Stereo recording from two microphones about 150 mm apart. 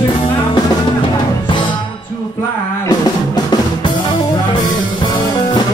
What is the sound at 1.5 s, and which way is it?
Music, 30° left (ahead or behind).